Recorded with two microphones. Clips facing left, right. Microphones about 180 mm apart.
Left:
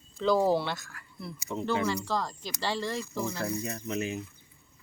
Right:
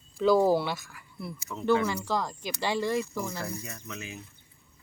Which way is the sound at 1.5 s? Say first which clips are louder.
Left 7 dB; 25° left (ahead or behind).